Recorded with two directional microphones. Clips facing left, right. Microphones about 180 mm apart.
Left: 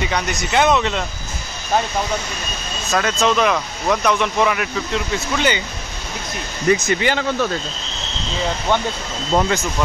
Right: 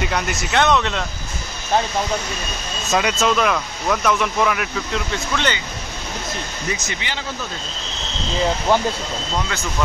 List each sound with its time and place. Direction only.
0.0 s speech: 5° right (ahead or behind)
2.9 s speech: 10° right (ahead or behind); by 5.6 s 10° left (ahead or behind)
6.7 s speech: 50° left (ahead or behind)
9.3 s speech: 55° left (ahead or behind)